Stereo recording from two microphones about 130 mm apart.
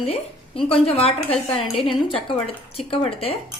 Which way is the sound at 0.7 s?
50° left (ahead or behind).